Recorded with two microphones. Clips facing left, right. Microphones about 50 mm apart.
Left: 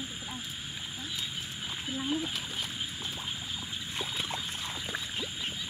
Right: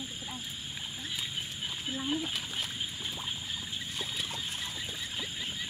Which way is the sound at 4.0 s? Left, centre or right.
Left.